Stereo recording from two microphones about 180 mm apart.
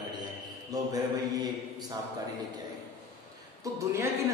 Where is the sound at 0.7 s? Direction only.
20° right (ahead or behind).